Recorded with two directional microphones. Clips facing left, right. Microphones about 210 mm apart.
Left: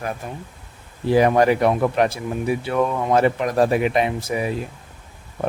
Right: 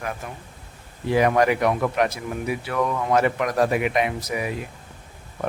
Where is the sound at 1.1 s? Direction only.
30° left (ahead or behind).